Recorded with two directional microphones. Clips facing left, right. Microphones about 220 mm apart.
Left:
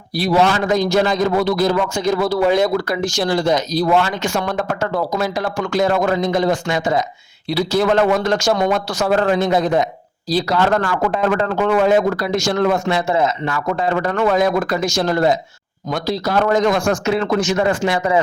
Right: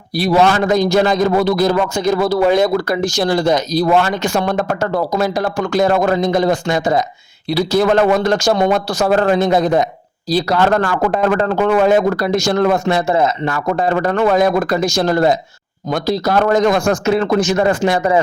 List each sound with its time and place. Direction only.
0.3 s a man's voice: 50° right (ahead or behind)